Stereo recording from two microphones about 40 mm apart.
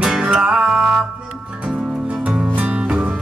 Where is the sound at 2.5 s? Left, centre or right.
Right.